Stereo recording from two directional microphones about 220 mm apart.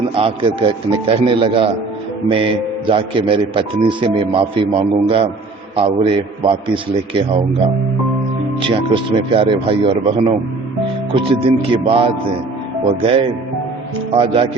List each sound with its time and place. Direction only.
0.2 s a man's voice: 25° right (ahead or behind)
8.6 s a man's voice: 25° right (ahead or behind)